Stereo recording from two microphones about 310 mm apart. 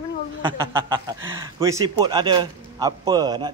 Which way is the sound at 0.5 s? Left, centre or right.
Centre.